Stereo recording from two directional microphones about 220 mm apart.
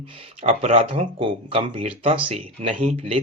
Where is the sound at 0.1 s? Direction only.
30° right (ahead or behind).